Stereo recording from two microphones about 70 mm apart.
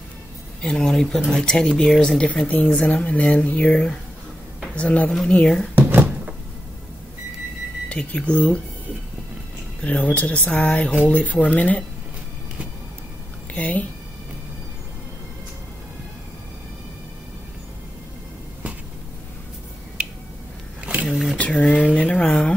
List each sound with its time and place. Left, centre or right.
0.6 s speech: centre
5.8 s cupboard open or close: right
7.9 s speech: centre
9.8 s speech: centre
13.6 s speech: left
20.8 s a sound: centre
21.1 s a sound: centre
21.4 s a sound: centre
21.6 s speech: centre